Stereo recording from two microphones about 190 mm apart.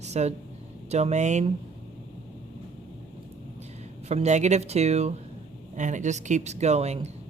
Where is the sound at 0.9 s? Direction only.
35° right (ahead or behind).